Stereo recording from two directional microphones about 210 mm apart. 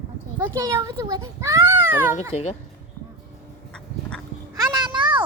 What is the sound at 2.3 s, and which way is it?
Speech, 30° left (ahead or behind).